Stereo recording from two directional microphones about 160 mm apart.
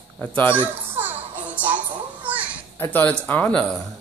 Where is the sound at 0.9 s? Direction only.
10° right (ahead or behind).